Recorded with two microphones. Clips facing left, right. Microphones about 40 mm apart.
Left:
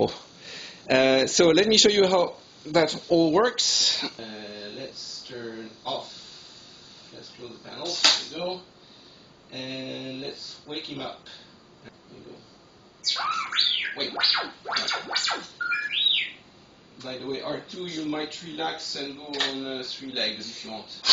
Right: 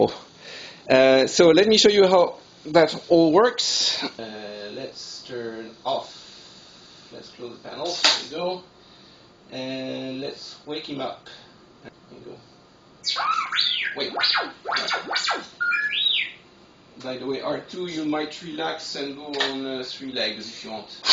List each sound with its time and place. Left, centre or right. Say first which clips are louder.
0.0 s speech: right 4 dB; centre
7.4 s speech: right 5 dB; centre
13.3 s music: right 3 dB; centre
14.7 s speech: right 3 dB; centre
15.0 s music: right 3 dB; centre
17.0 s speech: right 4 dB; centre